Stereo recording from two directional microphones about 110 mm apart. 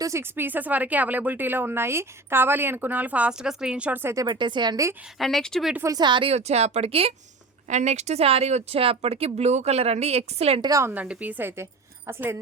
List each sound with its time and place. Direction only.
0.0 s speech: 25° right (ahead or behind)
4.1 s speech: 30° right (ahead or behind)
4.4 s speech: 45° right (ahead or behind)
5.2 s speech: 5° left (ahead or behind)
5.9 s speech: 40° right (ahead or behind)
6.3 s speech: 75° right (ahead or behind)
7.7 s speech: 90° right; by 10.6 s 70° right (ahead or behind)
10.6 s a woman's voice: 30° right (ahead or behind)
10.9 s a woman's voice: 10° right (ahead or behind)